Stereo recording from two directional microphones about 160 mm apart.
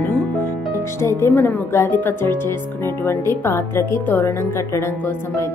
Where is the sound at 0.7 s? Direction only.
15° left (ahead or behind).